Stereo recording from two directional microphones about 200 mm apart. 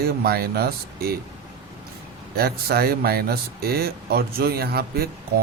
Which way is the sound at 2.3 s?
50° right (ahead or behind).